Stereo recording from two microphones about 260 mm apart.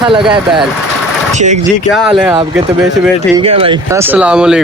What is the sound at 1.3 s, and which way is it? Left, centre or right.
Speech, right.